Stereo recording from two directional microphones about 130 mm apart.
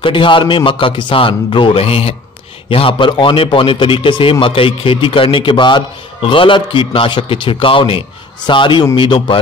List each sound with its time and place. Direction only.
0.0 s a man's voice: 40° left (ahead or behind)